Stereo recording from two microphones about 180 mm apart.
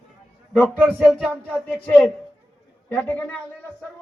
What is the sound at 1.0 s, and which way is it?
A woman's voice, centre (ahead or behind).